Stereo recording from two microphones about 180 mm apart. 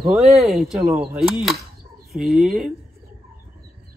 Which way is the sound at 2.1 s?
Centre (ahead or behind).